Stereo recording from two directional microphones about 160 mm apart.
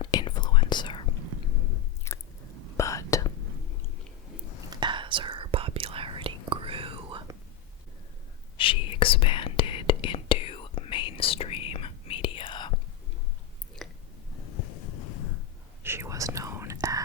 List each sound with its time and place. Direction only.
0.0 s whispering: 25° left (ahead or behind)
2.1 s biting: 15° left (ahead or behind)
2.7 s whispering: 20° left (ahead or behind)
4.7 s whispering: 30° right (ahead or behind)
8.5 s whispering: 35° left (ahead or behind)
13.8 s a sound: centre (ahead or behind)
15.8 s whispering: 15° right (ahead or behind)